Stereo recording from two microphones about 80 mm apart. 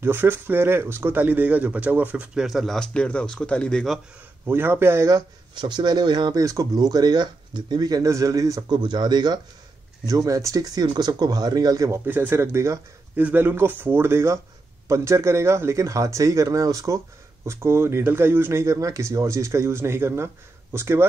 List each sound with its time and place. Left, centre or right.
0.0 s speech: right; by 3.8 s centre
4.5 s speech: right
5.5 s speech: right
6.3 s speech: right
10.0 s speech: right
12.1 s speech: right
12.4 s speech: right
13.1 s speech: right